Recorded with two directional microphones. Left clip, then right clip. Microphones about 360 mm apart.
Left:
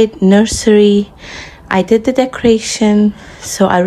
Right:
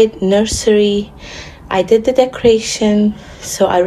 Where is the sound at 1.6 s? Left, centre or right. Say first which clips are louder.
Even; left.